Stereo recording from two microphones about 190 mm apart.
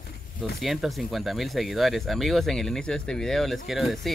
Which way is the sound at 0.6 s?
Centre (ahead or behind).